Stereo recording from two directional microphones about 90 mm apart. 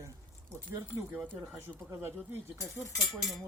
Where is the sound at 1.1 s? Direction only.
15° right (ahead or behind).